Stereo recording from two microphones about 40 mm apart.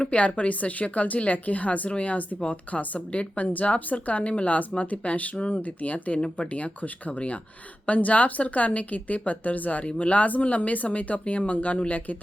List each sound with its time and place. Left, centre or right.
0.1 s speech: left